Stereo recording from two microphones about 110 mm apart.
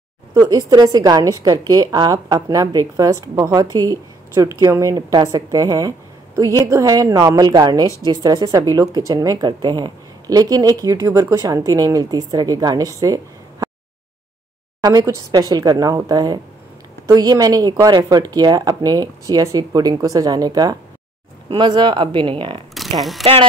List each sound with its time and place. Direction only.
0.3 s a woman's voice: 35° right (ahead or behind)
14.8 s a woman's voice: 40° right (ahead or behind)
22.8 s speech: centre (ahead or behind)